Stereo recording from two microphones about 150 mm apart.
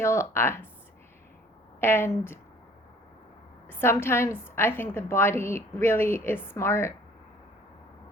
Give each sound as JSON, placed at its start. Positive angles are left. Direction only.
{"t": 0.0, "sound": "a woman's voice", "side_deg": 20}
{"t": 1.8, "sound": "a woman's voice", "side_deg": 15}
{"t": 3.7, "sound": "a woman's voice", "side_deg": 15}